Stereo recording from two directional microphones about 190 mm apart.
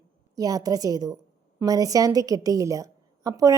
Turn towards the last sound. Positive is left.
turn(degrees=-20)  # may be behind; listen again after turning